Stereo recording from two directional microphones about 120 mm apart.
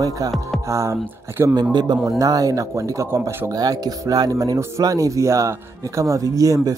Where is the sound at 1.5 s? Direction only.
35° right (ahead or behind); by 3.5 s 20° right (ahead or behind).